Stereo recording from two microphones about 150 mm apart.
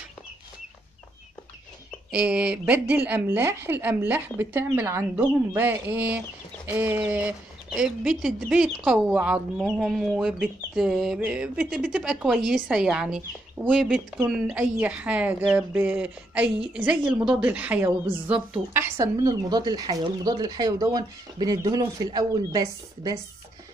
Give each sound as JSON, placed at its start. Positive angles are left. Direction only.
{"t": 2.0, "sound": "a woman's voice", "side_deg": -10}
{"t": 9.7, "sound": "a sound", "side_deg": 0}
{"t": 13.7, "sound": "a woman's voice", "side_deg": -5}